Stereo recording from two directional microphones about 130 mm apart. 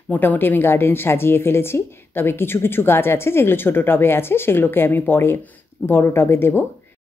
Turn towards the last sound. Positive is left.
turn(degrees=15)  # may be behind; listen again after turning